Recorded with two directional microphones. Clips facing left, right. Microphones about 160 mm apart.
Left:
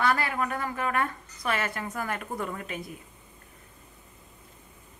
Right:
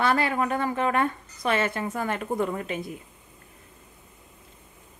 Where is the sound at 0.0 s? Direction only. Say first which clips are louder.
Right 3 dB; 25° right (ahead or behind).